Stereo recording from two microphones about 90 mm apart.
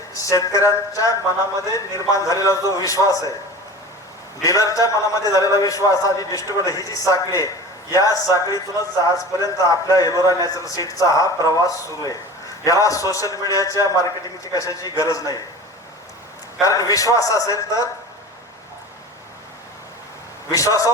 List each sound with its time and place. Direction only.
0.1 s a man's voice: 40° left (ahead or behind)
4.4 s a man's voice: 40° left (ahead or behind)
16.6 s a man's voice: 40° left (ahead or behind)
20.5 s a man's voice: 40° left (ahead or behind)